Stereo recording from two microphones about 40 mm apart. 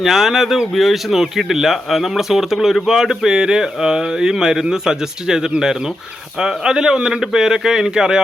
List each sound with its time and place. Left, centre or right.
0.0 s speech: centre